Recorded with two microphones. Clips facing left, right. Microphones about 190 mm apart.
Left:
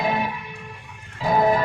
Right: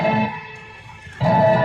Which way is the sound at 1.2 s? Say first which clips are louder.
Right 3 dB; 75° right (ahead or behind).